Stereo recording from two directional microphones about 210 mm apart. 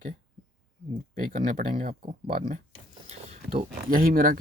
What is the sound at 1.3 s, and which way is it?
Speech, 35° right (ahead or behind).